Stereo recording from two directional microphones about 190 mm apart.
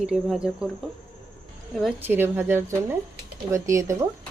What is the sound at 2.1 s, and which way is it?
Speech, 10° right (ahead or behind).